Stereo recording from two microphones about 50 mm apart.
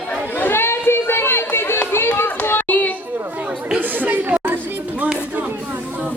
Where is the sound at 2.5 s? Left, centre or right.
Left.